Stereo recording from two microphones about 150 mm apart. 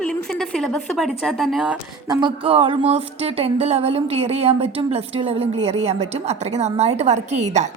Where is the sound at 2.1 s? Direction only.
30° right (ahead or behind); by 7.7 s 50° right (ahead or behind).